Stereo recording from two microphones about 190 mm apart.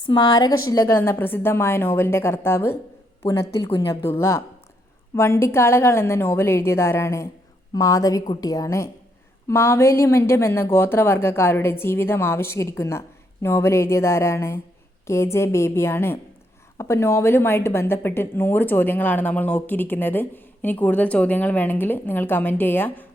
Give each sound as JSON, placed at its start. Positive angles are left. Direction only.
{"t": 0.1, "sound": "a woman's voice", "side_deg": 25}